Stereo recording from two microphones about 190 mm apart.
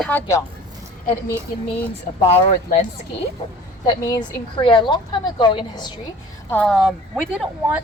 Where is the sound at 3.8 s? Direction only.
20° left (ahead or behind).